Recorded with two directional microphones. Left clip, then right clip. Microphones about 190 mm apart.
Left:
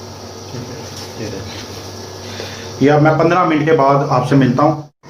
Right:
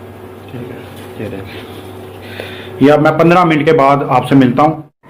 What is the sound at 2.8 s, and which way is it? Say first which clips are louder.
A man's voice: right 3 dB; 50° right (ahead or behind).